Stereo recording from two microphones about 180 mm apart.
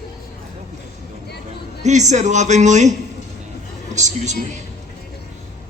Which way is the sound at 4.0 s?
40° right (ahead or behind).